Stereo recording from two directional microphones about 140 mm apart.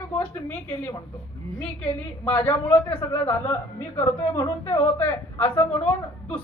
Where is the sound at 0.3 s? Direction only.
15° left (ahead or behind).